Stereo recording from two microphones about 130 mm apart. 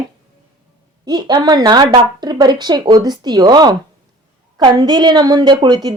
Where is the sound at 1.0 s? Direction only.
35° right (ahead or behind).